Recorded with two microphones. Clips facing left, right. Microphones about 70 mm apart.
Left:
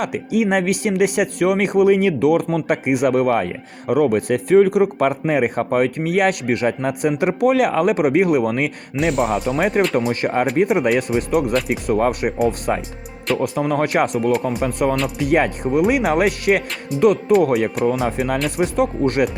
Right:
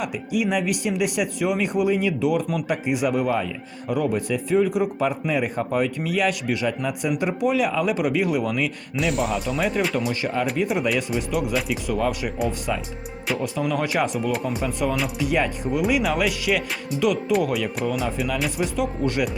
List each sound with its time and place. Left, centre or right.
0.0 s speech: left
9.0 s speech: centre
9.6 s speech: left
13.6 s speech: left